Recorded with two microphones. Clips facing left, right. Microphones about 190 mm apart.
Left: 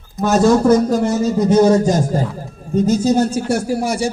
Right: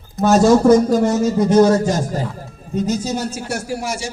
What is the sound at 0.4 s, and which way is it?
Speech, 5° right (ahead or behind).